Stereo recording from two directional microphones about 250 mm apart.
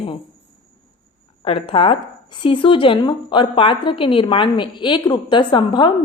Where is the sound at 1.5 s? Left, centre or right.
Left.